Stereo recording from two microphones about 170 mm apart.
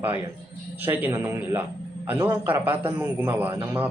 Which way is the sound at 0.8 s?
15° right (ahead or behind).